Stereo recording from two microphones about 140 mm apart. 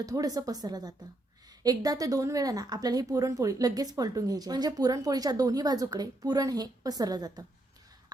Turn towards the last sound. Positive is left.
turn(degrees=-30)  # may be behind; listen again after turning